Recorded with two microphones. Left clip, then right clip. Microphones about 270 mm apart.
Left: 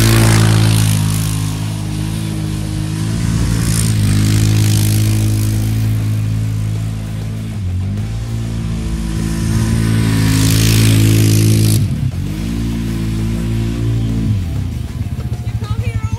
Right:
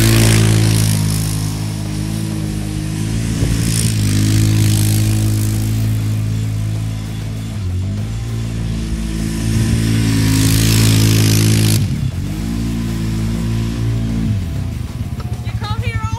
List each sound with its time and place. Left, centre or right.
0.0 s vehicle: centre
3.0 s vehicle: centre
9.4 s vehicle: centre